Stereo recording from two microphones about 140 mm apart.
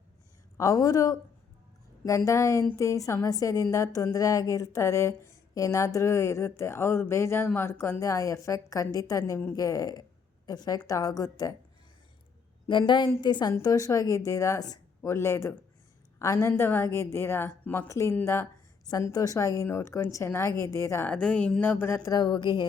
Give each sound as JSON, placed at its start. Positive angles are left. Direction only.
{"t": 0.5, "sound": "a woman's voice", "side_deg": 25}
{"t": 12.6, "sound": "a woman's voice", "side_deg": 35}
{"t": 21.1, "sound": "a woman's voice", "side_deg": 10}